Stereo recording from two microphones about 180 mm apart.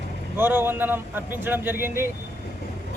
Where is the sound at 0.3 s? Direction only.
10° right (ahead or behind).